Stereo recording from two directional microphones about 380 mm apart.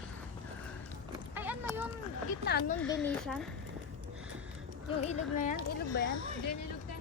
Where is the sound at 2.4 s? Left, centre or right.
Left.